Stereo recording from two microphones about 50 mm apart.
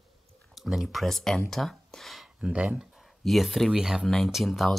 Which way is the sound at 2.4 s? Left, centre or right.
Right.